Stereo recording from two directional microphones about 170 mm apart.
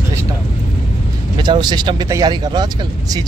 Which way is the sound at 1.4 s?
25° right (ahead or behind).